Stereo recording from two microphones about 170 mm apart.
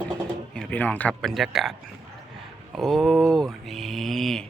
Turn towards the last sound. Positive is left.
turn(degrees=0)  # may be behind; listen again after turning